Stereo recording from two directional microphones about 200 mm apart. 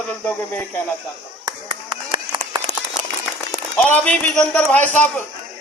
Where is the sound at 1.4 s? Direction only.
25° right (ahead or behind).